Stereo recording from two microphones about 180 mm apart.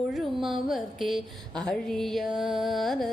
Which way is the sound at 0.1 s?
Centre (ahead or behind).